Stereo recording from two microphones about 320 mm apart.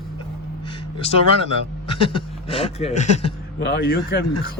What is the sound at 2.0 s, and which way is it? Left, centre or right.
Speech, centre.